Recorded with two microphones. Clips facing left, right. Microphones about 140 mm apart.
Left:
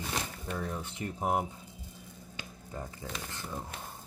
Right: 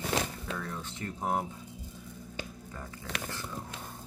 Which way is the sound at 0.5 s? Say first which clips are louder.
Left 2 dB; 15° left (ahead or behind).